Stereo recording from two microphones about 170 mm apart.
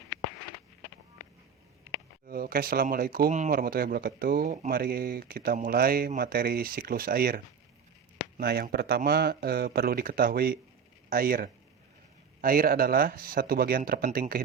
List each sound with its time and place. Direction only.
2.2 s speech: 55° right (ahead or behind)
4.7 s speech: 65° right (ahead or behind)